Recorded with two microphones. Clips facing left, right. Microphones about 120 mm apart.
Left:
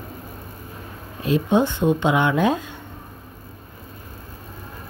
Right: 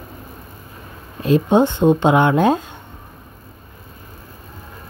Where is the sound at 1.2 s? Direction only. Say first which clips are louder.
Right 4 dB; 35° right (ahead or behind).